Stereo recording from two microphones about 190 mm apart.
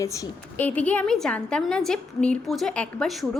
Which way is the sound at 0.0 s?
15° left (ahead or behind).